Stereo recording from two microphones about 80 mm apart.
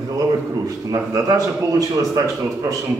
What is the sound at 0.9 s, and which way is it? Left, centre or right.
Speech, right.